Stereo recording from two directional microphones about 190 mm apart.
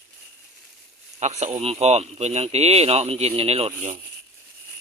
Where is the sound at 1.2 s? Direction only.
35° right (ahead or behind).